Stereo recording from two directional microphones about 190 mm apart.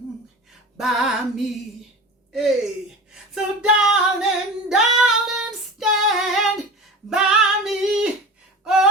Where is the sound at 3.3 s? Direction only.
5° right (ahead or behind).